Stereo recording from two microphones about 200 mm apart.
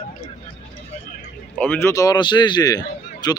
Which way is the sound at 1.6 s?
10° left (ahead or behind).